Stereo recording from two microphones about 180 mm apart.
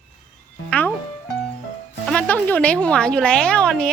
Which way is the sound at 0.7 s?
10° left (ahead or behind).